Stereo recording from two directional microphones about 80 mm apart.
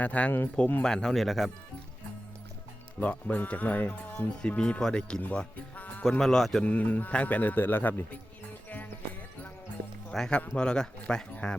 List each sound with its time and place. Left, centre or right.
0.0 s a man's voice: centre
3.0 s speech: centre
6.1 s speech: centre
6.7 s a man's voice: centre
10.1 s speech: centre